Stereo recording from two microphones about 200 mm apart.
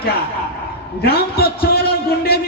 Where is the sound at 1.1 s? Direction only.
50° left (ahead or behind).